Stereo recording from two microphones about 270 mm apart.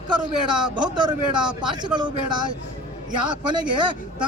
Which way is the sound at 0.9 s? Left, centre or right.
Centre.